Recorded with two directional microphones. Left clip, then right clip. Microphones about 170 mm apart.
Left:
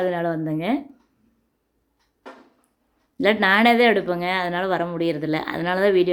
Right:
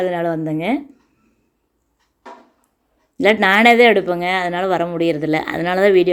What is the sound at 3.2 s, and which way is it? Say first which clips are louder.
Speech: right 5 dB; 15° right (ahead or behind).